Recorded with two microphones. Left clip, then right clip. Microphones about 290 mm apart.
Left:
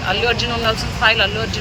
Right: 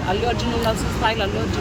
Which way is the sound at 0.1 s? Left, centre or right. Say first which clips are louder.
Left 4 dB; centre.